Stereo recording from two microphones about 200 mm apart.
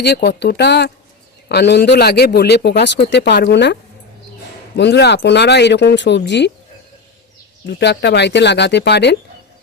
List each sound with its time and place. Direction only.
0.0 s speech: 55° left (ahead or behind)
4.8 s speech: 55° left (ahead or behind)
7.7 s speech: 60° left (ahead or behind)